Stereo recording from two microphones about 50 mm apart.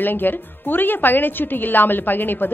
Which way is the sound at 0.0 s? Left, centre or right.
Left.